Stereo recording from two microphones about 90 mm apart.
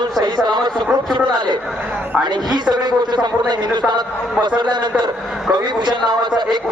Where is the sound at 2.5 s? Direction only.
55° right (ahead or behind).